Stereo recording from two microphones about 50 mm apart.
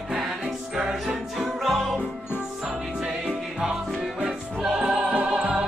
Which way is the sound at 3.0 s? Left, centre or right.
Centre.